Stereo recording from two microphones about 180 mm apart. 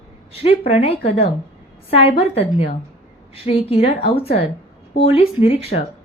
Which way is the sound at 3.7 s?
35° left (ahead or behind).